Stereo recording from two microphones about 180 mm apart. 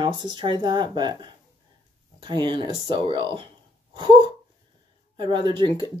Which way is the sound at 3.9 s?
25° right (ahead or behind).